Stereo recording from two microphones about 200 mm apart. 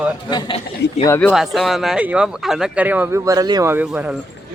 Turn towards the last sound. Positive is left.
turn(degrees=-5)  # may be behind; listen again after turning